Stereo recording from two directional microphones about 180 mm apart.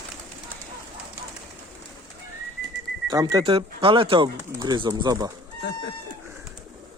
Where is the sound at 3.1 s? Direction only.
20° right (ahead or behind).